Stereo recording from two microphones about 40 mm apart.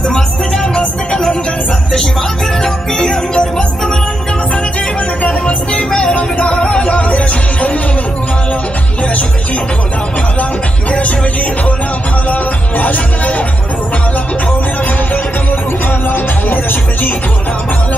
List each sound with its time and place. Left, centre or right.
0.1 s music: centre
2.6 s music: centre
6.1 s music: left
6.9 s music: left
10.9 s music: left
12.3 s music: left